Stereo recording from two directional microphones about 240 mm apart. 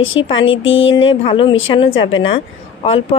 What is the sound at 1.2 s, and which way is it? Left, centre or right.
Speech, left.